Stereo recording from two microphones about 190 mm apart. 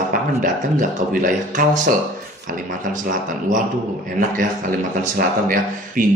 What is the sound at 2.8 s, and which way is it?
Speech, 45° right (ahead or behind).